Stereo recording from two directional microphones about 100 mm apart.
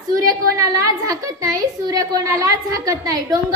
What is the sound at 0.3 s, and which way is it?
A woman's voice, 35° right (ahead or behind).